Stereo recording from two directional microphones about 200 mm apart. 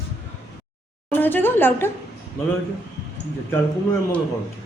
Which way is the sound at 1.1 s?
10° left (ahead or behind).